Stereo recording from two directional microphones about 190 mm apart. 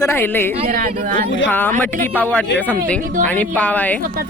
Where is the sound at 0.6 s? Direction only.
50° right (ahead or behind).